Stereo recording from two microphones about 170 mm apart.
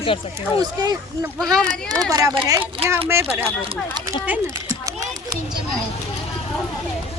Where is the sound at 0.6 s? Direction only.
25° right (ahead or behind).